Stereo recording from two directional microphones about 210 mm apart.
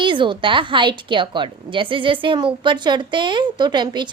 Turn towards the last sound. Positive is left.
turn(degrees=-20)  # may be behind; listen again after turning